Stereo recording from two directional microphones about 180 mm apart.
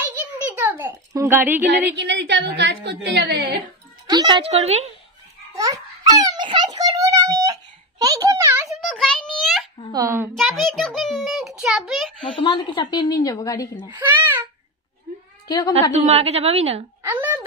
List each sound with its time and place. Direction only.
0.0 s a sound: 10° right (ahead or behind)
1.7 s a woman's voice: 75° right (ahead or behind)
4.1 s speech: 25° right (ahead or behind)
4.5 s a woman's voice: 35° right (ahead or behind)
5.5 s babbling: 20° right (ahead or behind)
6.2 s a sound: 25° right (ahead or behind)
8.8 s a sound: 5° left (ahead or behind)
9.9 s a woman's voice: 15° right (ahead or behind)
10.3 s a child's voice: centre (ahead or behind)
12.4 s a woman's voice: 25° left (ahead or behind)
13.8 s a child's voice: 10° right (ahead or behind)
15.4 s a woman's voice: 20° left (ahead or behind)
15.9 s a woman's voice: 35° right (ahead or behind)
17.0 s a woman's voice: 10° right (ahead or behind)